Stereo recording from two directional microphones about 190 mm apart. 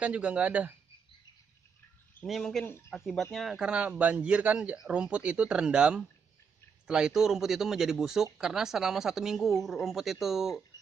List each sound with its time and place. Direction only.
0.0 s speech: 5° right (ahead or behind)
2.2 s speech: centre (ahead or behind)